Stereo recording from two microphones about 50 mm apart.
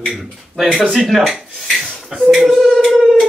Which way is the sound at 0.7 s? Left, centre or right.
Centre.